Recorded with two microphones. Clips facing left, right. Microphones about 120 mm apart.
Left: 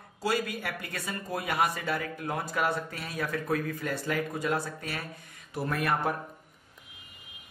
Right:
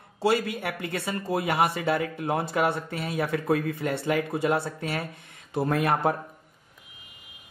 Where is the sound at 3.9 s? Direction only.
65° right (ahead or behind).